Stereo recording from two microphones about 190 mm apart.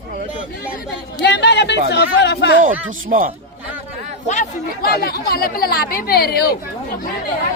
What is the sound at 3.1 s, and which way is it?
Speech, 45° right (ahead or behind).